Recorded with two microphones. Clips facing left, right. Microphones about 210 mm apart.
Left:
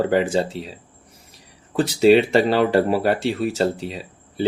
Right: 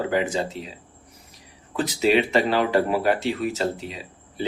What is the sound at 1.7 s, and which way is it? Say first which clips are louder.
Speech: left 6 dB; 30° left (ahead or behind).